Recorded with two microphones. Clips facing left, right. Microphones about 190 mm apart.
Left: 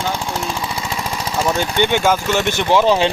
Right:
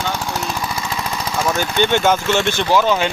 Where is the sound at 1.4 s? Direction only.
15° left (ahead or behind).